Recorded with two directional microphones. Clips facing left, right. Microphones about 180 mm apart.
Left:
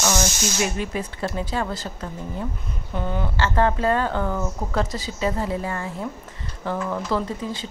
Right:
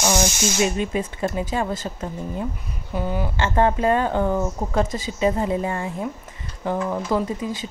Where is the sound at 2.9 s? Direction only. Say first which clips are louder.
Right 2 dB; 10° right (ahead or behind).